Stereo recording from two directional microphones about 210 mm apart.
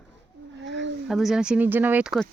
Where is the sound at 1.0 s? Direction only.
Centre (ahead or behind).